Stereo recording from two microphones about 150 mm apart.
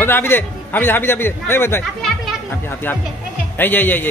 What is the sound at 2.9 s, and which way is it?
Speech, 15° left (ahead or behind).